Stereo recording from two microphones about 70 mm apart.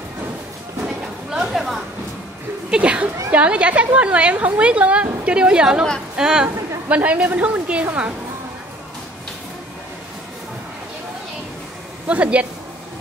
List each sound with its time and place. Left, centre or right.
1.3 s a sound: centre
2.7 s a woman's voice: centre
12.1 s a woman's voice: centre